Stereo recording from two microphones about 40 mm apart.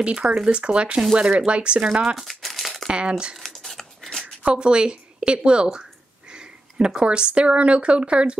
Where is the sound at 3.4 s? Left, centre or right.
Centre.